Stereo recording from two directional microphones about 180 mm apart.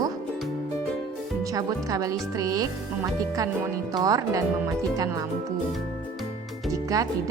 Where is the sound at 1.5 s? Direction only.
20° right (ahead or behind).